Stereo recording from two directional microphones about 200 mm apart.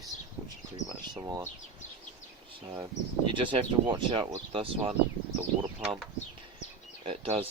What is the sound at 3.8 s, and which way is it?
Speech, 25° right (ahead or behind).